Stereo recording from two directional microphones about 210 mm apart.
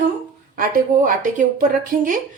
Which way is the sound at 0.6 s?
40° right (ahead or behind).